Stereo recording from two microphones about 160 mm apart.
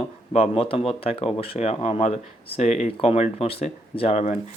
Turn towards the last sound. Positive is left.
turn(degrees=45)  # may be behind; listen again after turning